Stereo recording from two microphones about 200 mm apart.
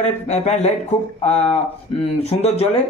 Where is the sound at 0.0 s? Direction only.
35° left (ahead or behind).